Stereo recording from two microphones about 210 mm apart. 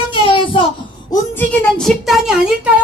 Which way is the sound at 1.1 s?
10° left (ahead or behind).